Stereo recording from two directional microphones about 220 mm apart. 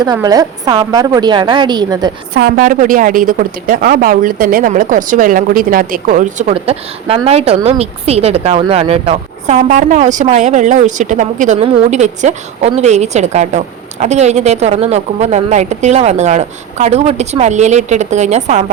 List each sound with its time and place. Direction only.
0.0 s a woman's voice: 15° right (ahead or behind)
2.3 s a woman's voice: 40° right (ahead or behind)